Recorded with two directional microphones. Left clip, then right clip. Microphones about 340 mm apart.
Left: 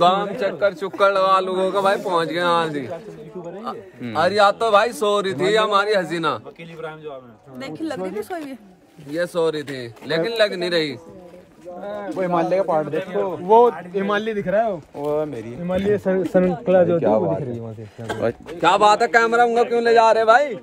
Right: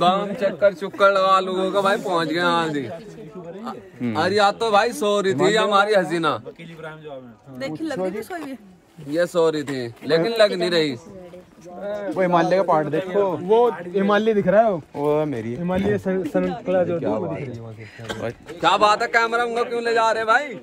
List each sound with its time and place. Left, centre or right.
0.0 s speech: centre
4.1 s speech: centre
7.5 s speech: centre
11.8 s speech: centre
12.2 s speech: right
13.5 s speech: centre
13.7 s a man's voice: centre; by 15.5 s right
15.9 s speech: centre
16.2 s a man's voice: left